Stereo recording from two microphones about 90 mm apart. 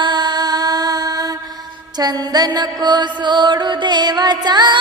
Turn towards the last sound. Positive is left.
turn(degrees=-55)  # may be behind; listen again after turning